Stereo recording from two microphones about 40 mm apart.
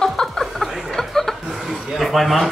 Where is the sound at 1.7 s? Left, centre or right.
Centre.